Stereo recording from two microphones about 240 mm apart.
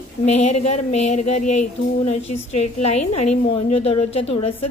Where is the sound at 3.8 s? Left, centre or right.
Left.